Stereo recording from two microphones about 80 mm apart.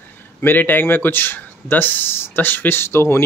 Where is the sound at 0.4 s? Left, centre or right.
Left.